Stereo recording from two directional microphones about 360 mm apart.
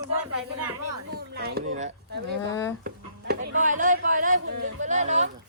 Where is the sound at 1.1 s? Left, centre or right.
Right.